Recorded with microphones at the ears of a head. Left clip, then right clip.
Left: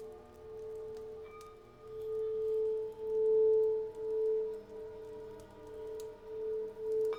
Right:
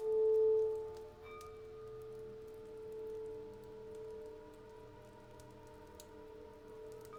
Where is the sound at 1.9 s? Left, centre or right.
Left.